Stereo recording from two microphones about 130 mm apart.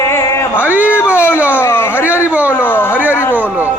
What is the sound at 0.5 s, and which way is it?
Speech, 10° right (ahead or behind).